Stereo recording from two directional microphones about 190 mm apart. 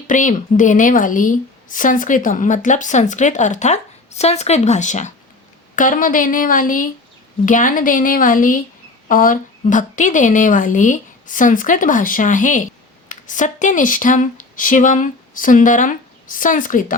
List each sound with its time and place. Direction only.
0.1 s a woman's voice: 45° left (ahead or behind)